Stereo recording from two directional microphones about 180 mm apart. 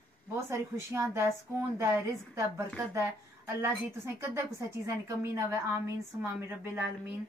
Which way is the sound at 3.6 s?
15° right (ahead or behind).